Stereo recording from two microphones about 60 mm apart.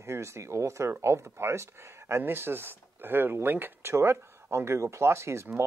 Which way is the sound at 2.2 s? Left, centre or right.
Right.